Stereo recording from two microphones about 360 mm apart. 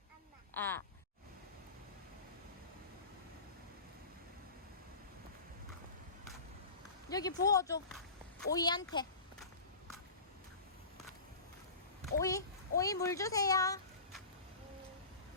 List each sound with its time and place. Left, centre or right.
0.5 s a sound: centre
7.1 s speech: centre
12.2 s speech: centre